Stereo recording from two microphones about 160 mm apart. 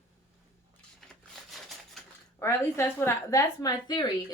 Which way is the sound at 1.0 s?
Centre (ahead or behind).